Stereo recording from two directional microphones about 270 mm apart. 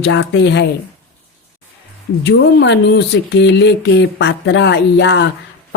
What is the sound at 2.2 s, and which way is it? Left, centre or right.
A woman's voice, left.